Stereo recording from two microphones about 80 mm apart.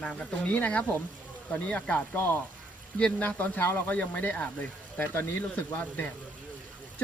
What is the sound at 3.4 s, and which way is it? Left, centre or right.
Speech, left.